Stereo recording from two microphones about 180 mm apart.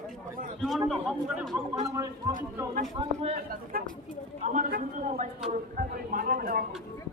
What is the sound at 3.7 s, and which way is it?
Speech, 55° right (ahead or behind).